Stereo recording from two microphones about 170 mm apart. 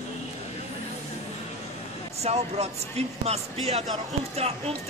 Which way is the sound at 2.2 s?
40° right (ahead or behind).